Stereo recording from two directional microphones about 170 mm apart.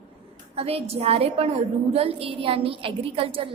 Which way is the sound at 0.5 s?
35° right (ahead or behind).